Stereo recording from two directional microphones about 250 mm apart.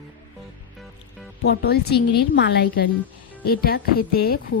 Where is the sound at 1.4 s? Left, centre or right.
Left.